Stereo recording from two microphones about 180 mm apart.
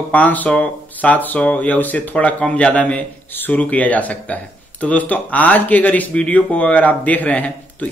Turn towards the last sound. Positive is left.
turn(degrees=10)  # may be behind; listen again after turning